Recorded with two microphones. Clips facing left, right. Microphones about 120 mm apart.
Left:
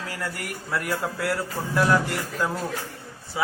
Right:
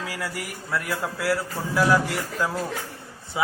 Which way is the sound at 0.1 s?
5° right (ahead or behind).